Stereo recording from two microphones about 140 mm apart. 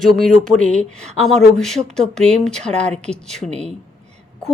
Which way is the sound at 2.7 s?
50° right (ahead or behind).